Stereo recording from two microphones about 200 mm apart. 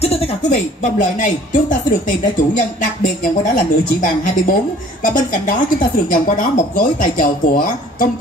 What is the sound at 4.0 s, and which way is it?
Speech, 45° left (ahead or behind).